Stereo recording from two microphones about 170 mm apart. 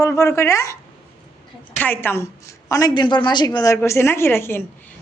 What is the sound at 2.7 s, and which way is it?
A woman's voice, 25° left (ahead or behind).